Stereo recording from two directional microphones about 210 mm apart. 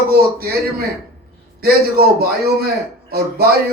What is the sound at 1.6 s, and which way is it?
Speech, 45° right (ahead or behind).